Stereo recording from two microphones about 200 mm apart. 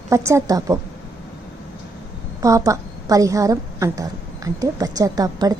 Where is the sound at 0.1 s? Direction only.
15° right (ahead or behind).